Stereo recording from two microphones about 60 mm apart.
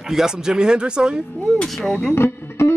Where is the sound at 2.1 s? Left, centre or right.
Left.